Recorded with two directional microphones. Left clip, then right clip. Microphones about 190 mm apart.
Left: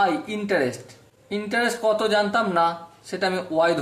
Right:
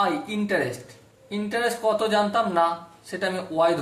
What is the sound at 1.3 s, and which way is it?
Speech, 50° left (ahead or behind).